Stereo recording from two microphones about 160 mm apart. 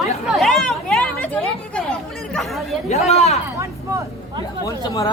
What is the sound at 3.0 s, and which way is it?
Speech, 40° left (ahead or behind).